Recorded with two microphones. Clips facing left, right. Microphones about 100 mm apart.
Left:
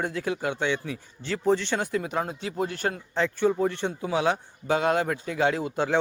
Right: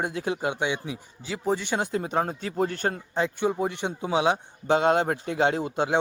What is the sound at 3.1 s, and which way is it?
A man's voice, 15° right (ahead or behind).